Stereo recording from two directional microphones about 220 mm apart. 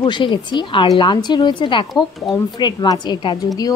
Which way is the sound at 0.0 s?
20° left (ahead or behind).